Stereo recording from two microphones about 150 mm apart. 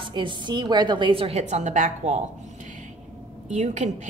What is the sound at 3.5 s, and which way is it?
Speech, 50° right (ahead or behind).